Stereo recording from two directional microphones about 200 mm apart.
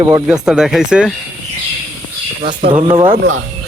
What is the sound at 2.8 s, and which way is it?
Speech, 25° right (ahead or behind).